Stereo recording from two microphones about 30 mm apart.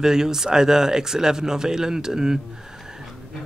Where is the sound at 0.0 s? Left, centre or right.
Centre.